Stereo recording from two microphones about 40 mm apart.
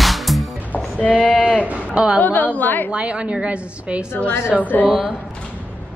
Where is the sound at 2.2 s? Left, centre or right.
Left.